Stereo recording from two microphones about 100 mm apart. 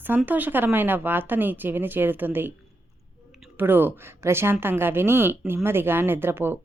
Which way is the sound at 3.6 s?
20° right (ahead or behind).